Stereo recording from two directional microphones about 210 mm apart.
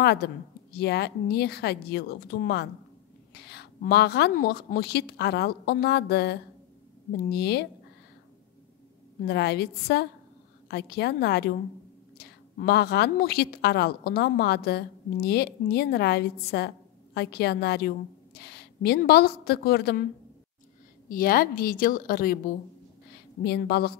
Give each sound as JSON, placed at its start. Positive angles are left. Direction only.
{"t": 0.0, "sound": "a woman's voice", "side_deg": 50}
{"t": 9.2, "sound": "a woman's voice", "side_deg": 50}
{"t": 21.1, "sound": "a woman's voice", "side_deg": 45}
{"t": 23.4, "sound": "a woman's voice", "side_deg": 50}